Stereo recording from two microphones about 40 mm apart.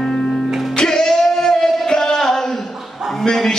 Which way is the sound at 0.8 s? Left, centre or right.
Centre.